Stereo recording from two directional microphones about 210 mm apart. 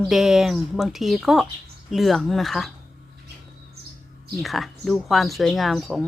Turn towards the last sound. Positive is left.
turn(degrees=0)  # may be behind; listen again after turning